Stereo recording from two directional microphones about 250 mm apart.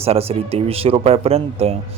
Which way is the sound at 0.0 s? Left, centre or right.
Right.